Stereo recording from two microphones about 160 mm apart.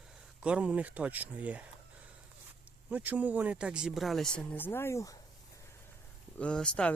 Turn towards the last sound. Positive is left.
turn(degrees=5)  # may be behind; listen again after turning